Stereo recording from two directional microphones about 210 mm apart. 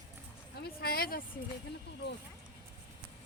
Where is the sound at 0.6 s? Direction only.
45° left (ahead or behind).